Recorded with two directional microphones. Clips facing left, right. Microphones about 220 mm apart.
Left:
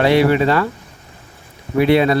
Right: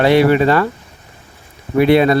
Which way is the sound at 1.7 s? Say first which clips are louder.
Right 2 dB; 50° right (ahead or behind).